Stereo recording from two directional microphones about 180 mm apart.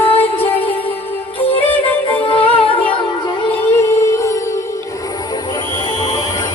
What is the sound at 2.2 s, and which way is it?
Music, 30° left (ahead or behind).